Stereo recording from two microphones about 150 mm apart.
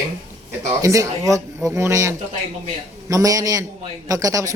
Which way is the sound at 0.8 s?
20° right (ahead or behind).